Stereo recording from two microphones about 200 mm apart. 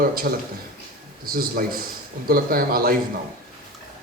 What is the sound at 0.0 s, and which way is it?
Speech, 45° right (ahead or behind).